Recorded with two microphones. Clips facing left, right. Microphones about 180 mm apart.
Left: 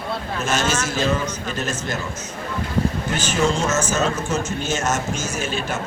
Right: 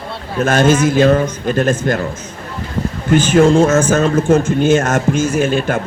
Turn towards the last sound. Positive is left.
turn(degrees=-55)  # may be behind; listen again after turning